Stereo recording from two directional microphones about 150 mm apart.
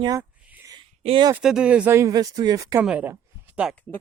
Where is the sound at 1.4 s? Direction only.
5° right (ahead or behind); by 2.8 s 25° right (ahead or behind).